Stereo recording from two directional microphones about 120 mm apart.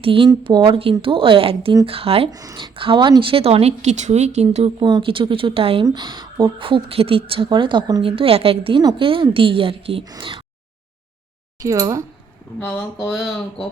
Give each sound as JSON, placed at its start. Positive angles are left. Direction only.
{"t": 0.0, "sound": "a woman's voice", "side_deg": -45}
{"t": 2.3, "sound": "speech", "side_deg": -30}
{"t": 2.6, "sound": "speech", "side_deg": -45}
{"t": 4.8, "sound": "a woman's voice", "side_deg": -40}
{"t": 5.8, "sound": "a woman's voice", "side_deg": -40}
{"t": 8.0, "sound": "a woman's voice", "side_deg": -50}
{"t": 10.0, "sound": "speech", "side_deg": -35}
{"t": 11.6, "sound": "speech", "side_deg": -25}
{"t": 12.5, "sound": "speech", "side_deg": 15}
{"t": 13.1, "sound": "speech", "side_deg": 0}